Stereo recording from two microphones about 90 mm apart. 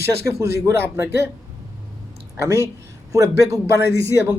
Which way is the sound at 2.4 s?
35° right (ahead or behind).